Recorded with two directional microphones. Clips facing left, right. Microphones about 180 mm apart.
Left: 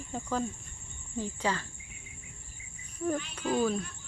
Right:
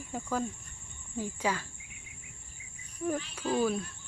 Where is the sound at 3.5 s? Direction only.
5° right (ahead or behind).